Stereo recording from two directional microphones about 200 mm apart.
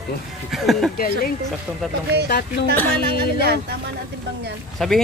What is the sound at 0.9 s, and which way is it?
Speech, 45° left (ahead or behind).